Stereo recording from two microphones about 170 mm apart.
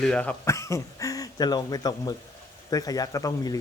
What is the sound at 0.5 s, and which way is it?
Speech, 20° left (ahead or behind).